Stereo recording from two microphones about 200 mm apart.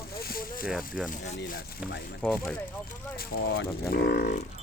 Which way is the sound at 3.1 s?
50° left (ahead or behind).